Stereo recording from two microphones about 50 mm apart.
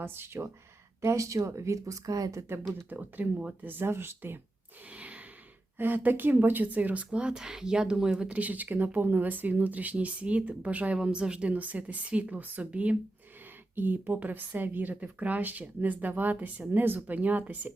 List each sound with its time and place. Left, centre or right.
0.0 s speech: right
1.0 s speech: right
2.5 s speech: right
2.9 s speech: right
4.9 s sigh: right
5.7 s speech: right; by 8.3 s centre
8.3 s speech: right
13.7 s speech: right